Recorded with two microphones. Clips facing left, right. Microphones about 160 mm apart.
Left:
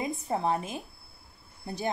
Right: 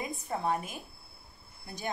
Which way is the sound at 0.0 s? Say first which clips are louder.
Left 4 dB; 20° left (ahead or behind).